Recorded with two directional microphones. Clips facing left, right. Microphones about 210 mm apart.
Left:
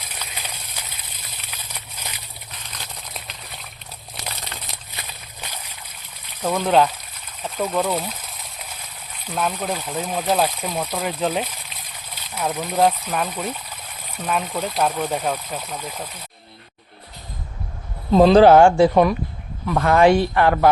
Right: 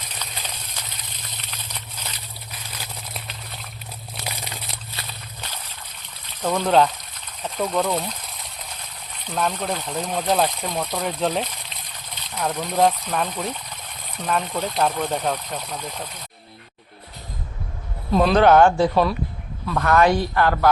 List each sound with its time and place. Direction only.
0.1 s a sound: 10° left (ahead or behind)
2.0 s slosh: 10° left (ahead or behind)
2.7 s crumpling: centre (ahead or behind)
4.9 s walk: 10° left (ahead or behind)
6.4 s speech: 5° left (ahead or behind)
9.2 s speech: 5° left (ahead or behind)
18.1 s speech: 30° left (ahead or behind)